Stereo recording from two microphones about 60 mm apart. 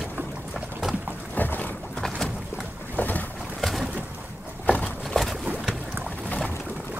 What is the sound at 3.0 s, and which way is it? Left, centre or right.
Boat, left.